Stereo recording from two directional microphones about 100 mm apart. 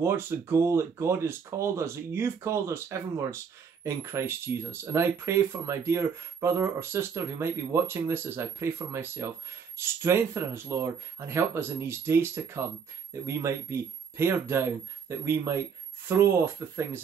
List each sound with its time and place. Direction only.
0.0 s speech: 25° right (ahead or behind)